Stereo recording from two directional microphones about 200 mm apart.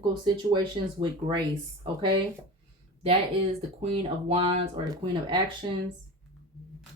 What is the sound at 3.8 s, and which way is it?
Speech, 30° right (ahead or behind).